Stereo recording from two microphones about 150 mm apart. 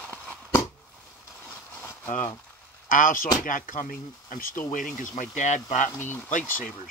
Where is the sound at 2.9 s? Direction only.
60° left (ahead or behind).